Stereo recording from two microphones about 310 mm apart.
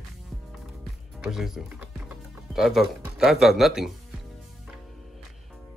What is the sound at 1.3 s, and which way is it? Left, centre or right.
Speech, centre.